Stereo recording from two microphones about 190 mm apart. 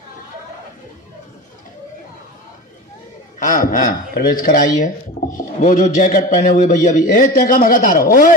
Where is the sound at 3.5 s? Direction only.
45° left (ahead or behind).